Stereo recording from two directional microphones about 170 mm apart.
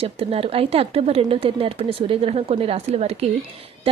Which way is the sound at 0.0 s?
35° right (ahead or behind).